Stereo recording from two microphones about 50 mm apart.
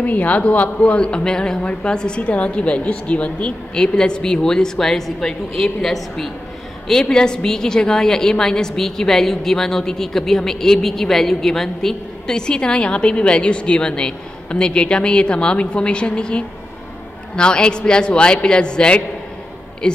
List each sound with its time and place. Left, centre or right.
0.0 s a man's voice: left